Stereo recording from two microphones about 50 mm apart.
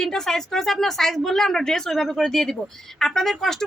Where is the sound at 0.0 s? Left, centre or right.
Centre.